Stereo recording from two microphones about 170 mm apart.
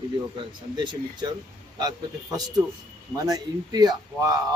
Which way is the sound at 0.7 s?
25° right (ahead or behind).